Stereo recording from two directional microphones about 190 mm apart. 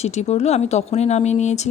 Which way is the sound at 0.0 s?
35° left (ahead or behind).